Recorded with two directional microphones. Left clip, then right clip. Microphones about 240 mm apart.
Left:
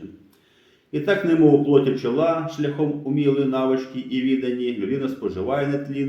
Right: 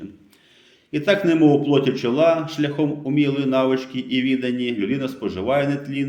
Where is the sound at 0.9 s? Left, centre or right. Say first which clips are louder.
Right 1 dB; right.